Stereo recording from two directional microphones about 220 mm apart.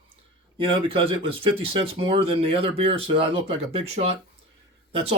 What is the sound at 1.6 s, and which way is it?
Speech, 25° right (ahead or behind).